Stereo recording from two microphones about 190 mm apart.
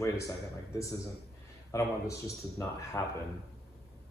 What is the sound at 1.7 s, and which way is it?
Speech, 15° left (ahead or behind).